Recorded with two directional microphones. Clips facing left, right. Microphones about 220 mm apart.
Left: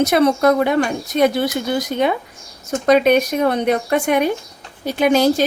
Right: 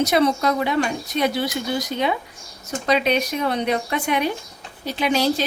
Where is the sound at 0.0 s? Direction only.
55° left (ahead or behind).